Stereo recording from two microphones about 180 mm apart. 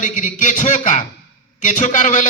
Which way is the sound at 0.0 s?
45° left (ahead or behind).